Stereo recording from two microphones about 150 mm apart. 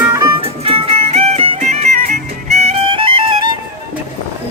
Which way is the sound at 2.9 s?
35° right (ahead or behind).